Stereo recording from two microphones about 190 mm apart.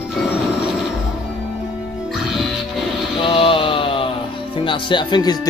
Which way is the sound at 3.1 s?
25° left (ahead or behind).